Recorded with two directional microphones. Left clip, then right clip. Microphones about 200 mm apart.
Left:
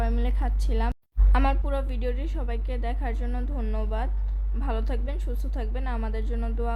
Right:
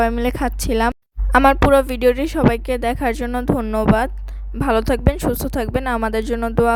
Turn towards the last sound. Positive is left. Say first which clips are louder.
# right 16 dB
turn(degrees=-55)  # may be behind; listen again after turning